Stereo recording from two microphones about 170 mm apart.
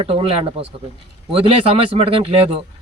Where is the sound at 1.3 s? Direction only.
35° right (ahead or behind).